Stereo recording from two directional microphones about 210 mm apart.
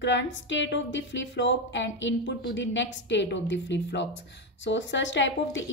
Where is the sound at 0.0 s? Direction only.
60° left (ahead or behind).